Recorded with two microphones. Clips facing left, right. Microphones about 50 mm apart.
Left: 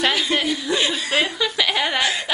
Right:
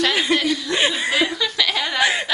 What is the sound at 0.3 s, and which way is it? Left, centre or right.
Chuckle, centre.